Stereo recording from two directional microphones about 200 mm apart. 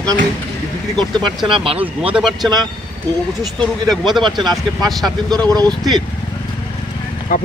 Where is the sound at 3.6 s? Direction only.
Centre (ahead or behind).